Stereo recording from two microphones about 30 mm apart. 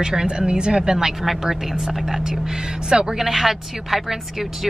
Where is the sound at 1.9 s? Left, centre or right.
Centre.